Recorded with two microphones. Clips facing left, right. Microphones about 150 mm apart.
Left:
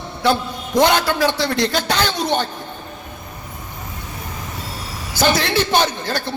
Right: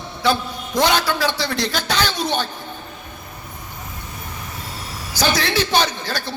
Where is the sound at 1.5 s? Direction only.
60° left (ahead or behind).